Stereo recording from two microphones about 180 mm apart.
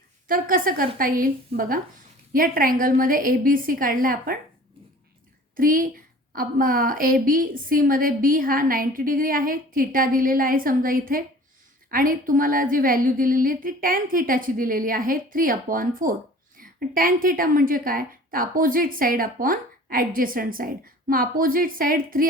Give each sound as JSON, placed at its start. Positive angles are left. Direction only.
{"t": 0.3, "sound": "a woman's voice", "side_deg": -50}
{"t": 5.5, "sound": "a woman's voice", "side_deg": -50}